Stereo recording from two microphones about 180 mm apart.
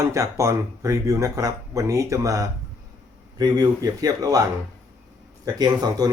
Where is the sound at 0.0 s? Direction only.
15° right (ahead or behind).